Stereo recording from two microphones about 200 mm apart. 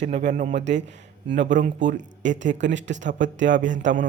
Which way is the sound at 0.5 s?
60° right (ahead or behind).